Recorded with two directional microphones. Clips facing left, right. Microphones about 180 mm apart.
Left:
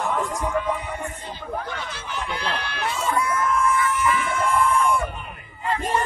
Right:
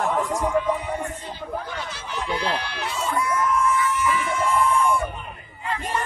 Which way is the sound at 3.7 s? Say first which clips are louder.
Left 1 dB; 55° left (ahead or behind).